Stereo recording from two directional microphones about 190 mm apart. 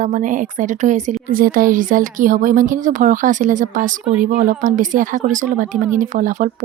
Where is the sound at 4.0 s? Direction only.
5° right (ahead or behind).